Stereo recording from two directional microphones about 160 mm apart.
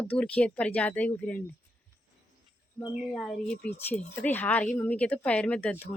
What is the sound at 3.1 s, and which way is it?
Speech, centre (ahead or behind).